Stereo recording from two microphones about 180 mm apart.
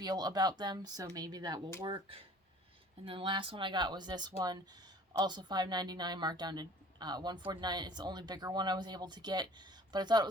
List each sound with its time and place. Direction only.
0.0 s a woman's voice: 20° right (ahead or behind)